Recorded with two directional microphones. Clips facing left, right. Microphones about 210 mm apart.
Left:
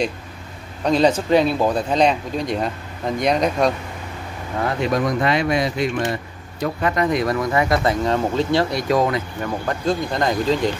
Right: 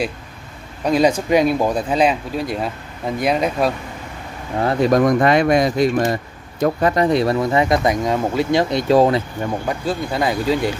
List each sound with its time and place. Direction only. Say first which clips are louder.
0.8 s speech: right 1 dB; 10° right (ahead or behind)
4.6 s speech: right 6 dB; 40° right (ahead or behind)
9.7 s speech: even; 5° right (ahead or behind)